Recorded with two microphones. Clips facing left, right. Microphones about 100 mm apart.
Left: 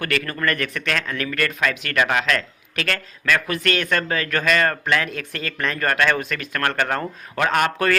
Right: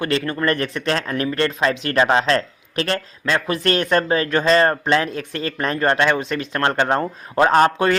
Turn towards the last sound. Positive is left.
turn(degrees=-25)  # may be behind; listen again after turning